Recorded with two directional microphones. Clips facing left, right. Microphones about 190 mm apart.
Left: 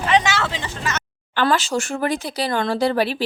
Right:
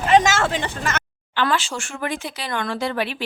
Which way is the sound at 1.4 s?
40° left (ahead or behind).